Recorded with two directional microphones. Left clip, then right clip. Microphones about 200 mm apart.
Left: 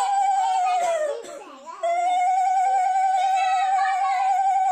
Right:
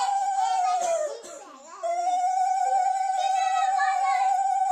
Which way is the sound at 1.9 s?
35° right (ahead or behind).